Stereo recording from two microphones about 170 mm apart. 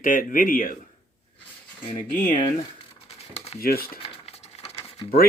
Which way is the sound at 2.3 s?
30° left (ahead or behind).